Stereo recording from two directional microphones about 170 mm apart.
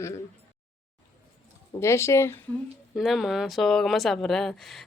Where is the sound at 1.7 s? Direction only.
15° left (ahead or behind).